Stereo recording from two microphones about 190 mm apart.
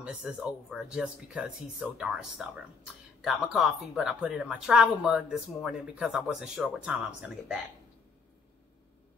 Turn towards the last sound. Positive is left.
turn(degrees=-5)  # may be behind; listen again after turning